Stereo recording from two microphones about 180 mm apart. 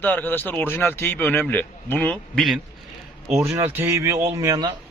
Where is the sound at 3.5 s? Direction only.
15° right (ahead or behind).